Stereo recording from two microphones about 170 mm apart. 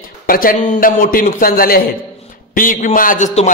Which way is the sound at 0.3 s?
55° left (ahead or behind).